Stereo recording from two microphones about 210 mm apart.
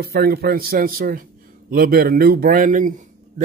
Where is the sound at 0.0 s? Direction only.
50° right (ahead or behind).